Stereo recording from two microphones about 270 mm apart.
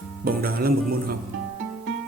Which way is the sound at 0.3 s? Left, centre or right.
Right.